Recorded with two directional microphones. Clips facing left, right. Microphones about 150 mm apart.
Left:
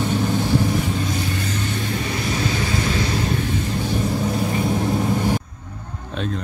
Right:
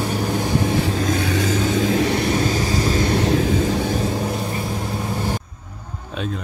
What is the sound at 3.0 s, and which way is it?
Vehicle, 65° right (ahead or behind).